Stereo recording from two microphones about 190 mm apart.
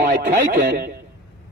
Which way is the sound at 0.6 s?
50° right (ahead or behind).